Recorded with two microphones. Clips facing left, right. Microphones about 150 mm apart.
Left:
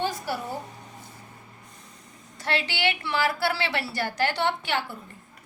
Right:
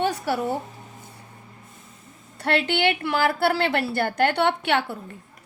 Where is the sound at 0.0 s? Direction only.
65° right (ahead or behind).